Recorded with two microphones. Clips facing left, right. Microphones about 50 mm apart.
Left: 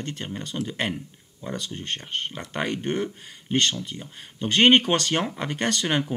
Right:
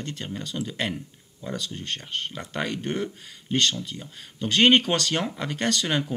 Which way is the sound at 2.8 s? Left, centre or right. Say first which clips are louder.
Left 2 dB; centre.